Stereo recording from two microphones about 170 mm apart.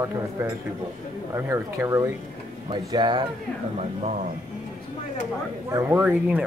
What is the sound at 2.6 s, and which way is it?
Speech, 25° right (ahead or behind).